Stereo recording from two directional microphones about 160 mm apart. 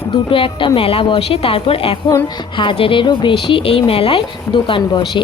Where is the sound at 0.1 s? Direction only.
35° left (ahead or behind).